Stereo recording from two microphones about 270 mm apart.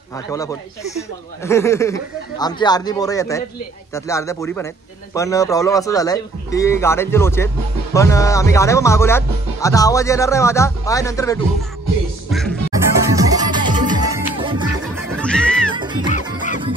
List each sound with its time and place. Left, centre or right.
0.3 s speech: centre
12.3 s music: centre
13.0 s music: centre
15.1 s music: centre
15.7 s music: centre
16.3 s music: left